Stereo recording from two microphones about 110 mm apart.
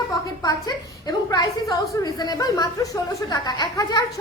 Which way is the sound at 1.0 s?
35° left (ahead or behind).